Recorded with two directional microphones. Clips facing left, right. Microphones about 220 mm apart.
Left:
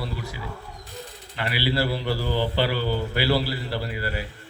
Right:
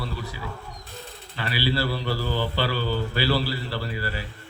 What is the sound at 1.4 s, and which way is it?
Mantra, 20° left (ahead or behind).